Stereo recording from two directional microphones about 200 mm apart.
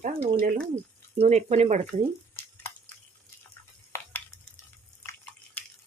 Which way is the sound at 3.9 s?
15° left (ahead or behind).